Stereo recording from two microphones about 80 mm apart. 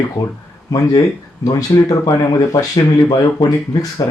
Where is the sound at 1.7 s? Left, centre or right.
Left.